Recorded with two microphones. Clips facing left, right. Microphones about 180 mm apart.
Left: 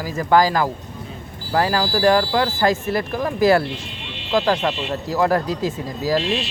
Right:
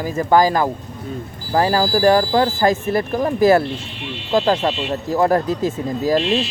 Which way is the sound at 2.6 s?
20° right (ahead or behind).